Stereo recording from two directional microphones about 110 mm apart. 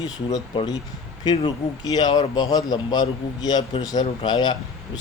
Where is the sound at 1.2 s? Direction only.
40° left (ahead or behind).